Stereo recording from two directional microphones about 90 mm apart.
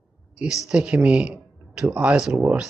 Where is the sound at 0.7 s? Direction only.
15° right (ahead or behind).